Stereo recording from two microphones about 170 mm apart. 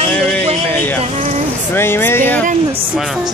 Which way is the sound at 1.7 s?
15° left (ahead or behind).